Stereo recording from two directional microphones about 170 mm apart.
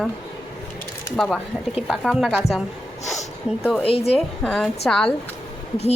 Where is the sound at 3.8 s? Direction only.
35° left (ahead or behind).